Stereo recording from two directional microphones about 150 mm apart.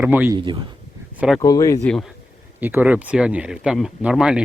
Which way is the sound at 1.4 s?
25° left (ahead or behind).